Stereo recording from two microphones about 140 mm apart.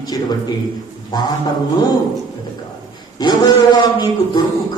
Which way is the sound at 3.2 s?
30° left (ahead or behind).